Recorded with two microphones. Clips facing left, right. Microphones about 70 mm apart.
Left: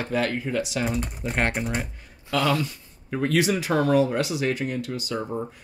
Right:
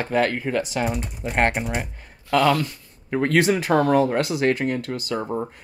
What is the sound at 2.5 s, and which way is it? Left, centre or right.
Speech, right.